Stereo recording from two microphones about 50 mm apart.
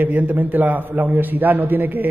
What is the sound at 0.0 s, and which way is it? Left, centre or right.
A man's voice, right.